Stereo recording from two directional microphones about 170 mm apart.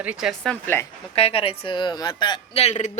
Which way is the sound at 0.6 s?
15° left (ahead or behind).